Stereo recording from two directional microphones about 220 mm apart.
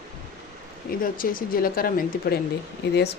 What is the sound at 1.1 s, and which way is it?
Speech, 40° left (ahead or behind).